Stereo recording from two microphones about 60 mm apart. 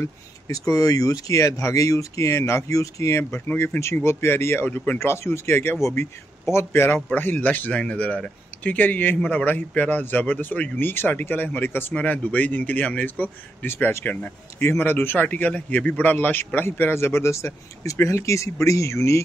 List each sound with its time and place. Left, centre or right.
0.5 s speech: left
7.2 s a man's voice: left
18.0 s speech: left